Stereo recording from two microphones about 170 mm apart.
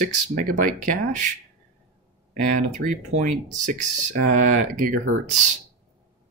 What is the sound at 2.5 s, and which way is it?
Speech, 50° right (ahead or behind).